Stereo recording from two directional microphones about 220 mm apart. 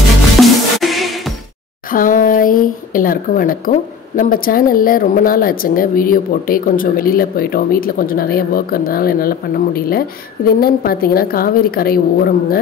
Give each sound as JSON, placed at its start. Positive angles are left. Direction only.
{"t": 0.4, "sound": "music", "side_deg": 0}
{"t": 1.9, "sound": "a sound", "side_deg": 40}
{"t": 4.2, "sound": "a woman's voice", "side_deg": 40}